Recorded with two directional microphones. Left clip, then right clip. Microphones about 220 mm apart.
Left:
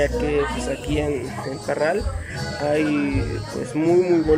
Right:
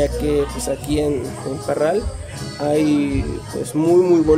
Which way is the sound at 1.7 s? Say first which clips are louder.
Right 3 dB; 15° right (ahead or behind).